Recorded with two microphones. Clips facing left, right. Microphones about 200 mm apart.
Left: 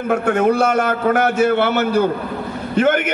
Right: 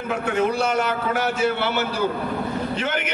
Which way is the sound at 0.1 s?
55° left (ahead or behind).